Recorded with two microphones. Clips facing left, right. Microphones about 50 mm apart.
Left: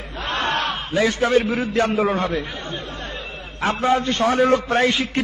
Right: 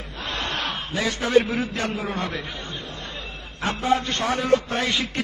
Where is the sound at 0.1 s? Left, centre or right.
Left.